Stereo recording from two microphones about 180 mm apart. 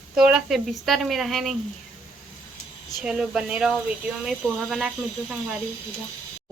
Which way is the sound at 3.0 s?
5° right (ahead or behind).